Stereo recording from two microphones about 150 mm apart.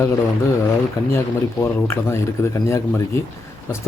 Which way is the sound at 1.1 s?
15° left (ahead or behind).